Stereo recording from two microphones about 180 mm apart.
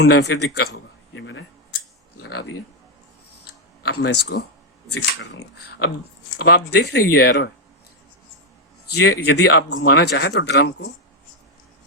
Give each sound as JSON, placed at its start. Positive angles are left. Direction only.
{"t": 0.0, "sound": "a man's voice", "side_deg": 65}
{"t": 3.8, "sound": "a man's voice", "side_deg": 65}
{"t": 8.9, "sound": "speech", "side_deg": 70}